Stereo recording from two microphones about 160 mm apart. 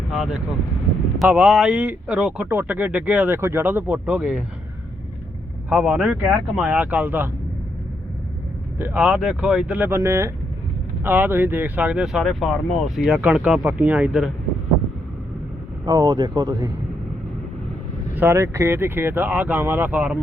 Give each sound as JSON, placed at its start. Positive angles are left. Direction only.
{"t": 0.1, "sound": "speech", "side_deg": 0}
{"t": 5.6, "sound": "speech", "side_deg": -5}
{"t": 8.8, "sound": "speech", "side_deg": -10}
{"t": 15.9, "sound": "speech", "side_deg": -25}
{"t": 18.1, "sound": "speech", "side_deg": -15}